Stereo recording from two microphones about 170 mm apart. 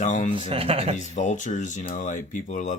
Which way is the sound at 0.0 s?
45° left (ahead or behind).